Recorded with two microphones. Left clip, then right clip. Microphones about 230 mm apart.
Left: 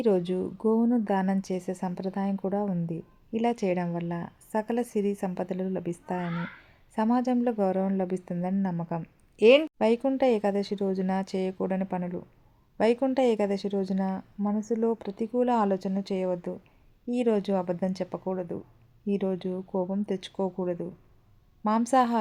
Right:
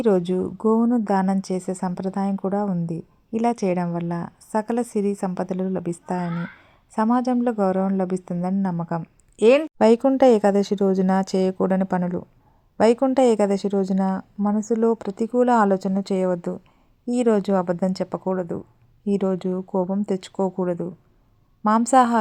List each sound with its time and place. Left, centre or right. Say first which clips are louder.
0.0 s speech: right 5 dB; centre
9.8 s a woman's voice: right 9 dB; right